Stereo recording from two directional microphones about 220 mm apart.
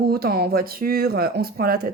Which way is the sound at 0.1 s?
45° right (ahead or behind).